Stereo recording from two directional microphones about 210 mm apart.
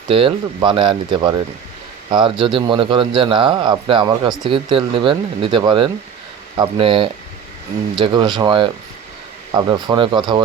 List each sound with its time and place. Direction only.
0.1 s a man's voice: 25° right (ahead or behind)